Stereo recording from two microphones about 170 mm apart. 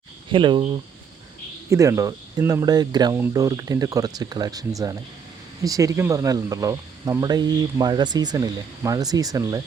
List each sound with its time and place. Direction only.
0.3 s speech: 30° right (ahead or behind)
1.7 s speech: 20° right (ahead or behind)